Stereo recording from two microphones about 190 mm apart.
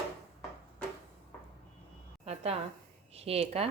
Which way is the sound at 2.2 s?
35° right (ahead or behind).